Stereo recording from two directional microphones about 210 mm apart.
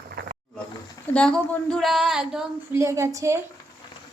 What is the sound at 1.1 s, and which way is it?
Speech, 5° left (ahead or behind).